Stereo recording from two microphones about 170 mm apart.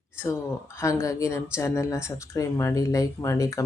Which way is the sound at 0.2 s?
15° left (ahead or behind).